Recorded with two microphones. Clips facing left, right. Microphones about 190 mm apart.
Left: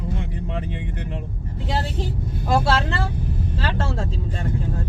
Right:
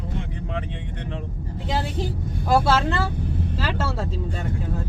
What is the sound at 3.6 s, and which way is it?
Speech, 5° right (ahead or behind).